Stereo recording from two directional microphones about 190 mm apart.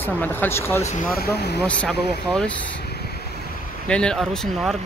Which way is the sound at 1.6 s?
5° left (ahead or behind).